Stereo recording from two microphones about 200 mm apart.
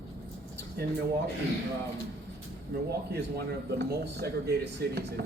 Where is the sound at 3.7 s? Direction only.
55° right (ahead or behind).